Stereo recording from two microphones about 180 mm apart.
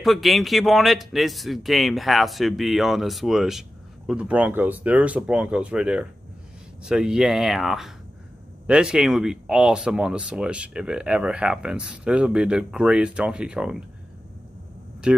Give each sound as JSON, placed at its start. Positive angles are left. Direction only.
{"t": 0.0, "sound": "speech", "side_deg": 0}
{"t": 15.1, "sound": "speech", "side_deg": -5}